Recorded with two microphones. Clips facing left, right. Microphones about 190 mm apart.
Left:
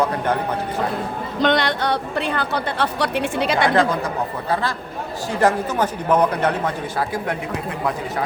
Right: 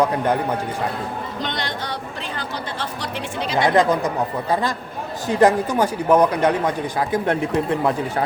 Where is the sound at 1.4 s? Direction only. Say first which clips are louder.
Left 12 dB; 65° left (ahead or behind).